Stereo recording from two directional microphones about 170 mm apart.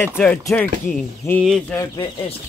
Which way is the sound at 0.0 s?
10° left (ahead or behind).